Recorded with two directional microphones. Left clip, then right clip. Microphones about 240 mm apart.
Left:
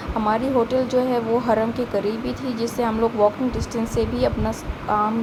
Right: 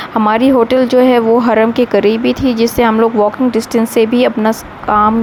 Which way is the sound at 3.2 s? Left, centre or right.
Right.